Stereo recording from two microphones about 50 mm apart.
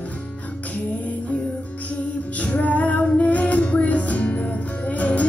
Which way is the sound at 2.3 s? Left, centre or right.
Left.